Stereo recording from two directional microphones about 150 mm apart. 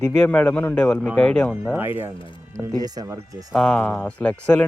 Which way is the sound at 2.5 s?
25° right (ahead or behind).